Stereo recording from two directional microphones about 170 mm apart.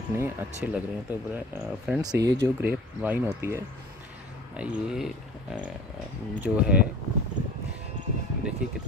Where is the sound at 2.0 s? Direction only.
20° right (ahead or behind).